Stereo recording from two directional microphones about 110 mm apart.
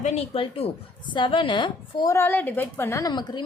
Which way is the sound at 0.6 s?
65° left (ahead or behind).